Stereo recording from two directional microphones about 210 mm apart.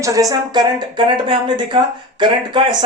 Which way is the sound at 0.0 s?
15° right (ahead or behind).